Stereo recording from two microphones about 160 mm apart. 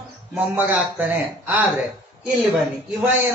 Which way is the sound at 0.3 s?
10° right (ahead or behind).